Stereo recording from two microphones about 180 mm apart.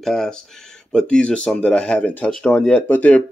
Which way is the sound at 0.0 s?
Centre (ahead or behind).